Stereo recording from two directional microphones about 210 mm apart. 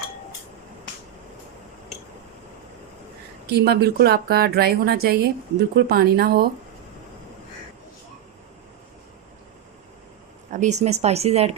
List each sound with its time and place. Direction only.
3.4 s a woman's voice: 50° right (ahead or behind)
10.5 s speech: 35° right (ahead or behind)